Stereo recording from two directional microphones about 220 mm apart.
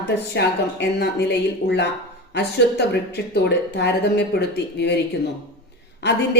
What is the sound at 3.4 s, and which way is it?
Speech, 50° left (ahead or behind).